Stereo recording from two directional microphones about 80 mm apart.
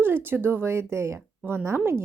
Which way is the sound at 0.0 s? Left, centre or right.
Right.